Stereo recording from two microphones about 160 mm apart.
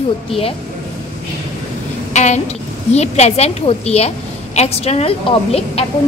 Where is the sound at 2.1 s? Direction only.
45° left (ahead or behind).